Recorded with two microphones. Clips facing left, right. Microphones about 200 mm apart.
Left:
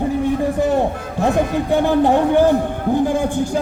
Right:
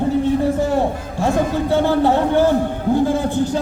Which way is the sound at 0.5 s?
20° left (ahead or behind).